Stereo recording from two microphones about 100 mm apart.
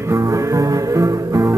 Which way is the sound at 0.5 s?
30° right (ahead or behind).